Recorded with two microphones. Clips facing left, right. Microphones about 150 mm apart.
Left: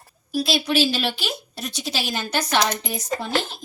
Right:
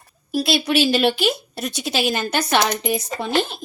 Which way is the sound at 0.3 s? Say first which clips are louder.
Right 2 dB; 60° right (ahead or behind).